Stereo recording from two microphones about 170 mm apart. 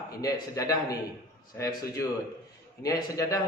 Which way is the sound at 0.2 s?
20° left (ahead or behind).